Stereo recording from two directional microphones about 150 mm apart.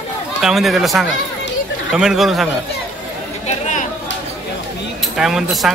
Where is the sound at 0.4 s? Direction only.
Centre (ahead or behind).